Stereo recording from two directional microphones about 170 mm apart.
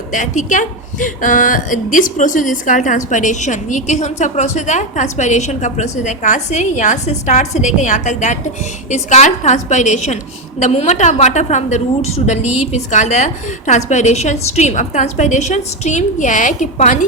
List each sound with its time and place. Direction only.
0.1 s a woman's voice: 45° left (ahead or behind)